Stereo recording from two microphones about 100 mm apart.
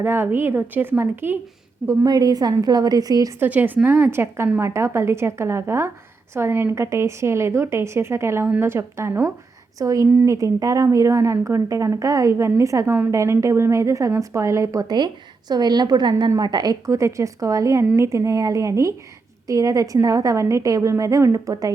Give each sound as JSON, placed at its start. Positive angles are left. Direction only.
{"t": 0.0, "sound": "a woman's voice", "side_deg": -20}
{"t": 2.0, "sound": "a woman's voice", "side_deg": -40}
{"t": 3.4, "sound": "a woman's voice", "side_deg": -20}
{"t": 10.1, "sound": "a woman's voice", "side_deg": -20}
{"t": 10.3, "sound": "a woman's voice", "side_deg": -35}
{"t": 16.8, "sound": "a woman's voice", "side_deg": -30}